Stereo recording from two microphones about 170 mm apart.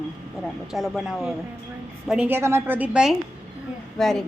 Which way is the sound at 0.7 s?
Centre (ahead or behind).